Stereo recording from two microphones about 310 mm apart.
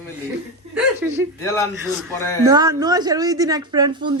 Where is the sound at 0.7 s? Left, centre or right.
Centre.